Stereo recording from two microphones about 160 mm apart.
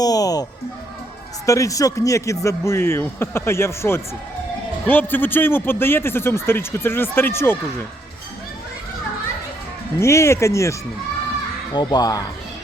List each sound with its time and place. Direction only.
0.0 s speech: 25° left (ahead or behind)
1.5 s a man's voice: 20° left (ahead or behind)
10.0 s a man's voice: 15° left (ahead or behind)